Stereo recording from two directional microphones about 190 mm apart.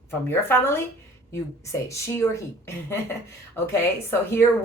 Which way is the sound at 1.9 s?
15° left (ahead or behind).